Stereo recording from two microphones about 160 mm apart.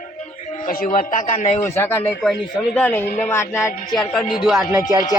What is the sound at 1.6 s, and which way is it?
Speech, 15° left (ahead or behind).